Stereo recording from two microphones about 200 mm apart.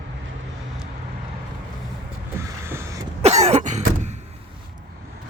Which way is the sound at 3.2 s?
35° right (ahead or behind).